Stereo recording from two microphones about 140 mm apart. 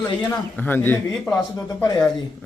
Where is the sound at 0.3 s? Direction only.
15° left (ahead or behind).